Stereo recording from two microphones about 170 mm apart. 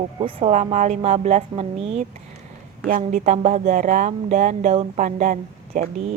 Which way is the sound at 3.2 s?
40° right (ahead or behind).